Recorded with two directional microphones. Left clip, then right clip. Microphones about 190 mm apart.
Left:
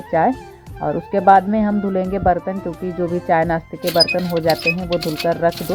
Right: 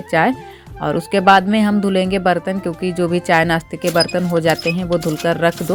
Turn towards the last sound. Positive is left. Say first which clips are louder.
# right 1 dB
turn(degrees=-40)  # may be behind; listen again after turning